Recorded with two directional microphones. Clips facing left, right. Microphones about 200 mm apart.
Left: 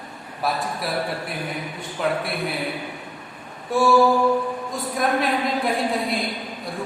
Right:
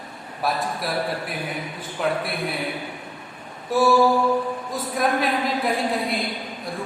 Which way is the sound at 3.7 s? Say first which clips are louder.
Even; centre (ahead or behind).